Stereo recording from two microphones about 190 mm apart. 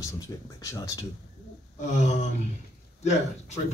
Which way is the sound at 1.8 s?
40° left (ahead or behind).